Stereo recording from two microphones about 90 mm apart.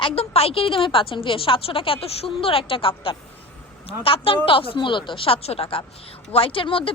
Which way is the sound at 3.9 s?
90° left.